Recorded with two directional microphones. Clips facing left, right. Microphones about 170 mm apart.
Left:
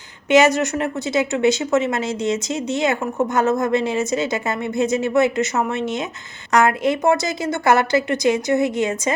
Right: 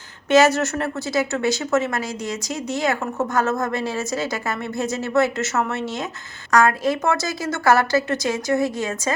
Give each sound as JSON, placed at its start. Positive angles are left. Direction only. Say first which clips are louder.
{"t": 0.3, "sound": "a woman's voice", "louder": "left 1 dB", "side_deg": 15}